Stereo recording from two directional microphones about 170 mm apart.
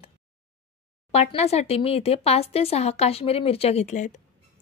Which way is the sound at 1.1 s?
40° left (ahead or behind).